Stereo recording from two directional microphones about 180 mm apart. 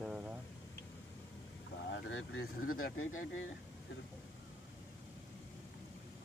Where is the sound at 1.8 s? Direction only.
85° left.